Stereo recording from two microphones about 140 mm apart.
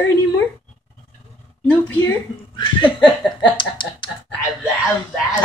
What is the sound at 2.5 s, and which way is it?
Laughter, 35° left (ahead or behind).